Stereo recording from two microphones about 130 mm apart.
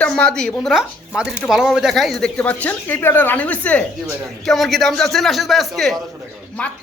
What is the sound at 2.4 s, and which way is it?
A man's voice, 10° left (ahead or behind).